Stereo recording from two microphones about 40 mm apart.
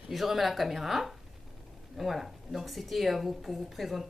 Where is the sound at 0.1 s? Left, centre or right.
Centre.